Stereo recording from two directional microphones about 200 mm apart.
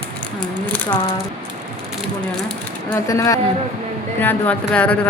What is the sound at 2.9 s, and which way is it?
A woman's voice, 15° left (ahead or behind).